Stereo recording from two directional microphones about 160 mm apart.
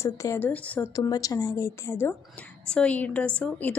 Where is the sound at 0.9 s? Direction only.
20° left (ahead or behind).